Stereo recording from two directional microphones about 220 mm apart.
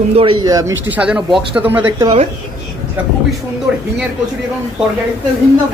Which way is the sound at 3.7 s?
5° right (ahead or behind).